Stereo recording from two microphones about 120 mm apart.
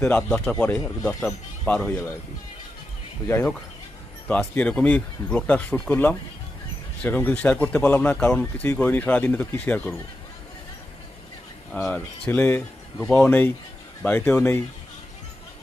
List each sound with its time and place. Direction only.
0.0 s speech: 5° left (ahead or behind)
4.3 s speech: 15° left (ahead or behind)
11.7 s speech: 10° left (ahead or behind)